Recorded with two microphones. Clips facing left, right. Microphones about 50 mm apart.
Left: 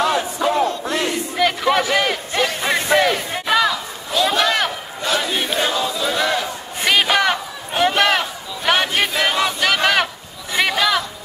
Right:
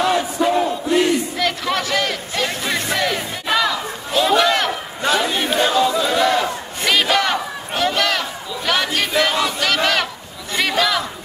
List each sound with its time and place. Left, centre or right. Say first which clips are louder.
0.0 s battle cry: right 1 dB; centre
0.7 s battle cry: right 4 dB; centre
1.3 s a sound: left 4 dB; centre
3.4 s chatter: left 1 dB; centre
4.4 s a sound: right 2 dB; centre
5.4 s chatter: right 2 dB; centre
5.7 s choir: right 5 dB; centre
6.0 s battle cry: right 3 dB; centre
6.8 s crowd: left 1 dB; centre
9.1 s battle cry: right 1 dB; centre
10.5 s chatter: left 1 dB; centre